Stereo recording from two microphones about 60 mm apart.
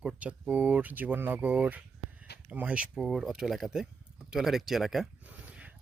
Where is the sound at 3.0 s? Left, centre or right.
Centre.